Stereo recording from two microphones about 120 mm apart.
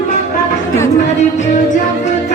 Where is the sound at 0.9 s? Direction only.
90° left.